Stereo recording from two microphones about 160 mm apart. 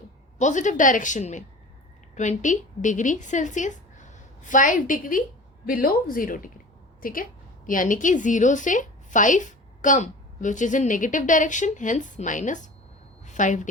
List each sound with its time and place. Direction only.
0.3 s a woman's voice: 50° left (ahead or behind)